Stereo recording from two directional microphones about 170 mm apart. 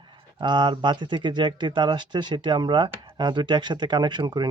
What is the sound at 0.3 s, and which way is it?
Speech, 25° right (ahead or behind).